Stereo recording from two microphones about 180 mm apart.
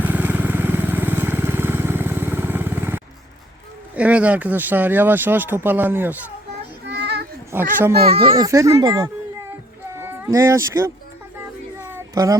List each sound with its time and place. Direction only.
0.0 s vehicle: 10° right (ahead or behind)
3.9 s speech: 10° right (ahead or behind)
6.9 s child singing: 70° right (ahead or behind)
7.5 s speech: 10° right (ahead or behind)
8.0 s speech: 35° right (ahead or behind)
8.4 s speech: 15° right (ahead or behind)
10.0 s speech: 15° right (ahead or behind)
11.9 s a sound: 15° right (ahead or behind)